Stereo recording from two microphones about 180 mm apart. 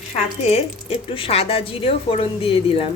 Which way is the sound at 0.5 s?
30° left (ahead or behind).